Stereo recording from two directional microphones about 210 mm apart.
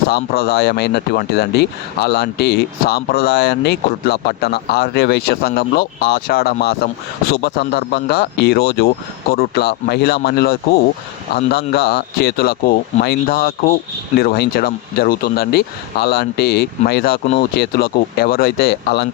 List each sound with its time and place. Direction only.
0.1 s speech: 50° left (ahead or behind)